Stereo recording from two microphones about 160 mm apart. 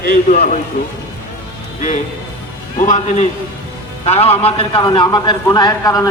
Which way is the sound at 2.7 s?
50° left (ahead or behind).